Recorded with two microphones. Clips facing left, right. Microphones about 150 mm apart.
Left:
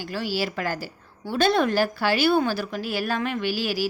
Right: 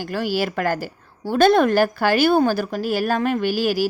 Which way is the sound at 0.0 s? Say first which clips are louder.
Right 5 dB; 50° right (ahead or behind).